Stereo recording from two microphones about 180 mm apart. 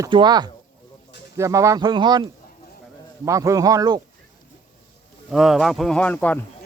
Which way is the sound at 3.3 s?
15° right (ahead or behind).